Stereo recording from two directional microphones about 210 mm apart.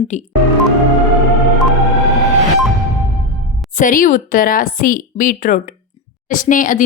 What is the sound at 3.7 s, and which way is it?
A woman's voice, 40° left (ahead or behind).